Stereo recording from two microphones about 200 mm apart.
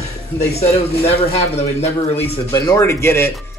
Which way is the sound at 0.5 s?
30° left (ahead or behind).